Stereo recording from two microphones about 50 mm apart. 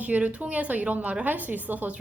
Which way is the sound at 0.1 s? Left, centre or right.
Right.